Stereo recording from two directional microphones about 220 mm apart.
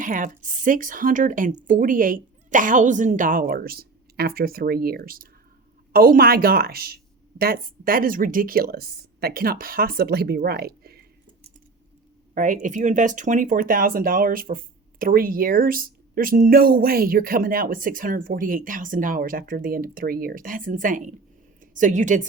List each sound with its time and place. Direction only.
0.0 s a woman's voice: 35° right (ahead or behind)
12.3 s speech: 35° right (ahead or behind)